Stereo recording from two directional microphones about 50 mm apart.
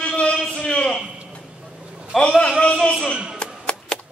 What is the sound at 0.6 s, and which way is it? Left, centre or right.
Speech, centre.